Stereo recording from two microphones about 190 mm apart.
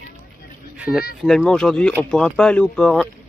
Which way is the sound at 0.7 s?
5° right (ahead or behind).